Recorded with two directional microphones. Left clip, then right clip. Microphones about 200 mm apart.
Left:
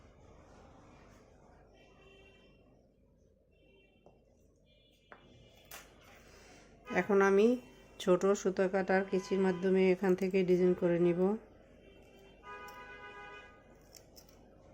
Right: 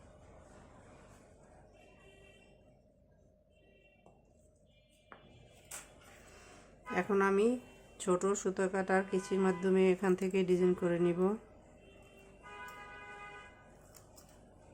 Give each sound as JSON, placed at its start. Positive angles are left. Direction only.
{"t": 6.9, "sound": "speech", "side_deg": 20}